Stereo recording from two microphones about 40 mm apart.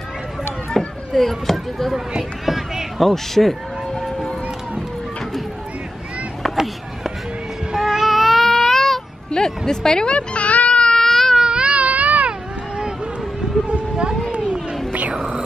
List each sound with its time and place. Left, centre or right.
0.7 s speech: centre
2.4 s a sound: centre
6.5 s a sound: centre
9.4 s music: centre
9.7 s speech: centre
10.1 s baby cry: left
11.0 s baby cry: centre
11.3 s baby cry: right
12.3 s a sound: right
14.9 s music: right
15.1 s music: right